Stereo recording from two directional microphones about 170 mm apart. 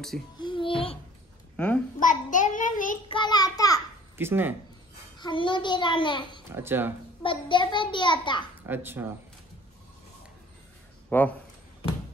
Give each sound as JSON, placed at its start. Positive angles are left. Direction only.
{"t": 0.4, "sound": "a sound", "side_deg": 30}
{"t": 2.0, "sound": "a sound", "side_deg": 50}
{"t": 3.1, "sound": "child singing", "side_deg": 25}
{"t": 4.2, "sound": "speech", "side_deg": -10}
{"t": 5.2, "sound": "a child's voice", "side_deg": 30}
{"t": 6.5, "sound": "speech", "side_deg": -15}
{"t": 7.2, "sound": "a child's voice", "side_deg": 30}
{"t": 8.6, "sound": "speech", "side_deg": -10}
{"t": 11.1, "sound": "speech", "side_deg": 10}